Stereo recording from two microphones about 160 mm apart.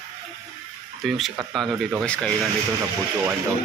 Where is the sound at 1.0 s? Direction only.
Centre (ahead or behind).